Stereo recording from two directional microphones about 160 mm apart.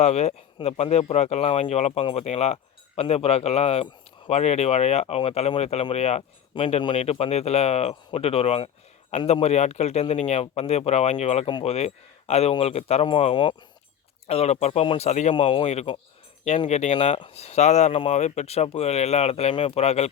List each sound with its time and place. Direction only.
0.0 s speech: 45° left (ahead or behind)